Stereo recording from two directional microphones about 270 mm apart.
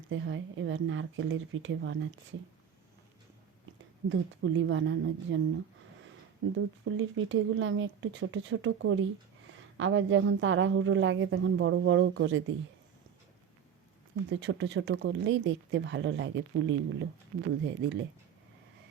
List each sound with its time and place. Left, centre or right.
0.1 s speech: right
4.1 s speech: right
6.4 s speech: right
14.3 s speech: right